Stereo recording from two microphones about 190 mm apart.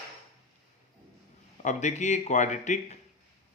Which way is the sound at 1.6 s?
40° left (ahead or behind).